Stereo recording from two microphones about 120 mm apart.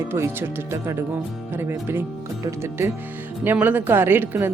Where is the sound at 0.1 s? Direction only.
20° right (ahead or behind).